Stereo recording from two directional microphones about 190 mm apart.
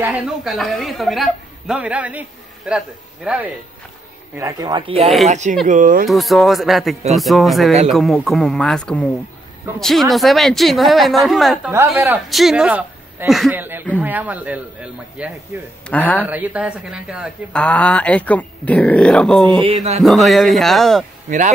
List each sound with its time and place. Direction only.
0.0 s a woman's voice: 5° right (ahead or behind)
4.4 s speech: 20° right (ahead or behind); by 6.0 s 45° right (ahead or behind)
6.0 s a woman's voice: centre (ahead or behind)
11.7 s a man's voice: 10° right (ahead or behind)
15.9 s speech: 10° left (ahead or behind)
16.2 s a man's voice: 10° right (ahead or behind)
17.5 s speech: 5° left (ahead or behind)
19.6 s speech: 35° right (ahead or behind)
20.0 s a woman's voice: centre (ahead or behind)